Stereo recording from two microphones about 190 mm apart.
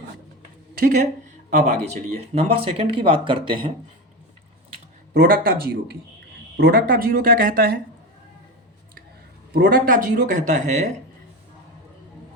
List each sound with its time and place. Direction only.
0.8 s speech: 45° right (ahead or behind); by 3.7 s 25° right (ahead or behind)
5.1 s speech: 55° right (ahead or behind)
9.5 s speech: 50° right (ahead or behind)